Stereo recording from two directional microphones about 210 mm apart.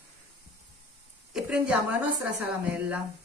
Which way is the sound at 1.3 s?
5° right (ahead or behind).